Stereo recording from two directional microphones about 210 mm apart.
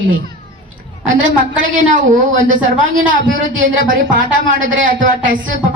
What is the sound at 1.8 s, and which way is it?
A woman's voice, 40° right (ahead or behind).